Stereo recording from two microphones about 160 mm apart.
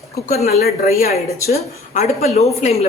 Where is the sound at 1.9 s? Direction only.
45° left (ahead or behind).